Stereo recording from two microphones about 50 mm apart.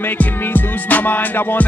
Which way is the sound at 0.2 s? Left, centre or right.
Left.